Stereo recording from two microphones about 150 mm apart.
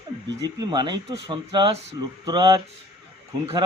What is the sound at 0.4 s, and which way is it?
Speech, 25° right (ahead or behind).